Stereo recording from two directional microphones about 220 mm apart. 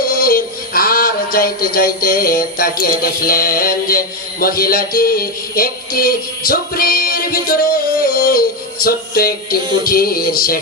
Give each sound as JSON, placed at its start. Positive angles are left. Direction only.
{"t": 0.1, "sound": "music", "side_deg": 40}